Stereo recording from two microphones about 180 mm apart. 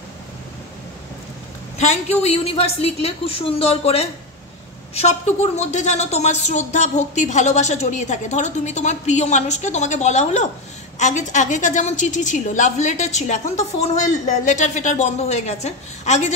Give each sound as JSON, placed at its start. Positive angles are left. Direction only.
{"t": 1.8, "sound": "a woman's voice", "side_deg": 40}